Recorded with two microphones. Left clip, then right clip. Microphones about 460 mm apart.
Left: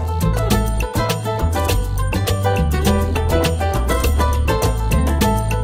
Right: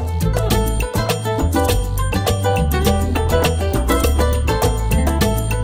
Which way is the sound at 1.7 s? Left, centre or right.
Right.